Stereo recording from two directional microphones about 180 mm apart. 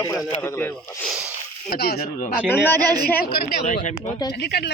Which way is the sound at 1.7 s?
60° left (ahead or behind).